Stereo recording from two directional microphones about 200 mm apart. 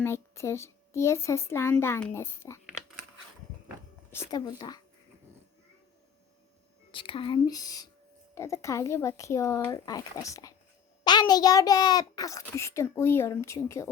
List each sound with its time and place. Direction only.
0.0 s a child's voice: 15° left (ahead or behind)
4.1 s speech: 15° left (ahead or behind)
6.9 s a child's voice: 25° left (ahead or behind)